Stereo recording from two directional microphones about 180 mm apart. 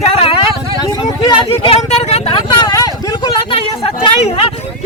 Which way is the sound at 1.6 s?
35° left (ahead or behind).